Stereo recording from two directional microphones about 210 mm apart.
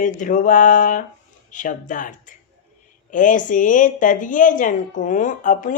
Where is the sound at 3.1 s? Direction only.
40° left (ahead or behind).